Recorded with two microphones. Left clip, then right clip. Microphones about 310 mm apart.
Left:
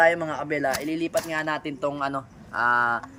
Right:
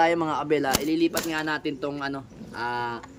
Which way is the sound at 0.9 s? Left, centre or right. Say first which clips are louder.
Right 4 dB; right.